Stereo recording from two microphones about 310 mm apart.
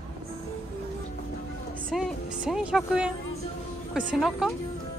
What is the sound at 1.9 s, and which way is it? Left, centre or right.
Speech, centre.